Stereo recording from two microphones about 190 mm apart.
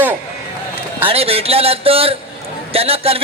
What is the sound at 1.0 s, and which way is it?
A man's voice, 30° right (ahead or behind).